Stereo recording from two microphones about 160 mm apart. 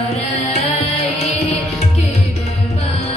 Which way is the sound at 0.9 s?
40° left (ahead or behind).